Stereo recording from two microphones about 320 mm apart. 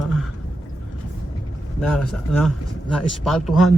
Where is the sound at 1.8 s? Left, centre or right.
Centre.